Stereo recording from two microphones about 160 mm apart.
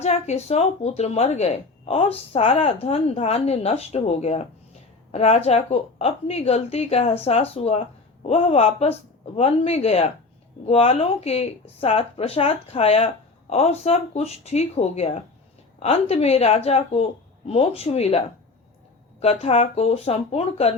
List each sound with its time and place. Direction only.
0.0 s speech: 45° left (ahead or behind)
19.2 s speech: 40° left (ahead or behind)